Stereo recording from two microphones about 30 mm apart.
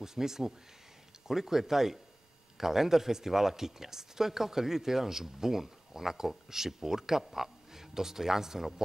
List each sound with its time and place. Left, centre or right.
0.0 s speech: centre